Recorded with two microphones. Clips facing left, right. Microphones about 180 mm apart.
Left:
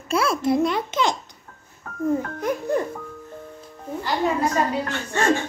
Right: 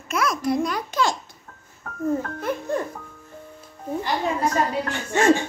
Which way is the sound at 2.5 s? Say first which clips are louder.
Left 1 dB; 10° left (ahead or behind).